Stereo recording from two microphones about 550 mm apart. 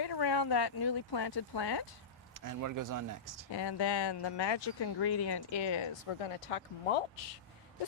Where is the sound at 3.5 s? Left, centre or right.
Left.